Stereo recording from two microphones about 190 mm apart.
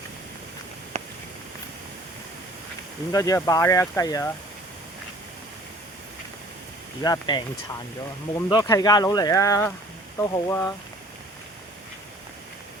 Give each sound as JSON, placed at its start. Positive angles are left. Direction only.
{"t": 0.9, "sound": "a sound", "side_deg": -35}
{"t": 3.1, "sound": "speech", "side_deg": 15}
{"t": 7.0, "sound": "speech", "side_deg": 20}
{"t": 8.4, "sound": "speech", "side_deg": 20}